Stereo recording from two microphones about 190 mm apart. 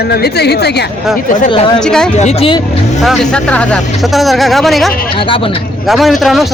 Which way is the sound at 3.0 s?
Centre (ahead or behind).